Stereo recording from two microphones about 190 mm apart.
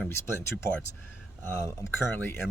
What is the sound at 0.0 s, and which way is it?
Speech, 10° left (ahead or behind).